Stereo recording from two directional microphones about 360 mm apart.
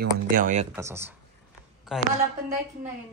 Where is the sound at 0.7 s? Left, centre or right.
Centre.